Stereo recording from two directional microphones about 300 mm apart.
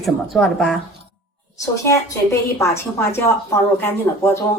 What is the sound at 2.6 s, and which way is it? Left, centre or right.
A woman's voice, centre.